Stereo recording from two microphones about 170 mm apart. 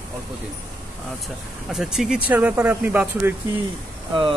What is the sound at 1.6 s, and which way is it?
Speech, 5° right (ahead or behind).